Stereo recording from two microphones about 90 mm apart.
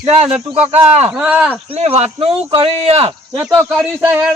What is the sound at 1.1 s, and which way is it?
Speech, 15° right (ahead or behind).